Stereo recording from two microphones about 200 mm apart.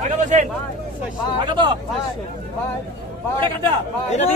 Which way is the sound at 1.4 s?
25° right (ahead or behind).